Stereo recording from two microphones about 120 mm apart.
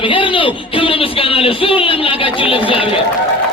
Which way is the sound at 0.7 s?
50° left (ahead or behind).